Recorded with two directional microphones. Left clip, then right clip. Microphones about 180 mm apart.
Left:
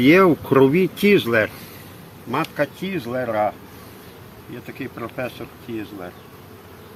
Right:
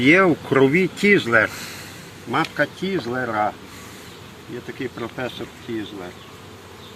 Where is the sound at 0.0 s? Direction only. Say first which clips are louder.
Left 1 dB; 55° left (ahead or behind).